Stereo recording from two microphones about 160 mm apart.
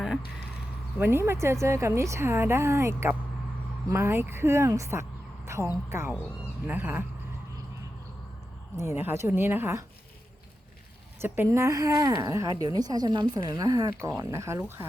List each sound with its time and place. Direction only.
0.9 s a woman's voice: 15° right (ahead or behind)
8.8 s a woman's voice: 15° right (ahead or behind)
11.2 s a woman's voice: 15° right (ahead or behind)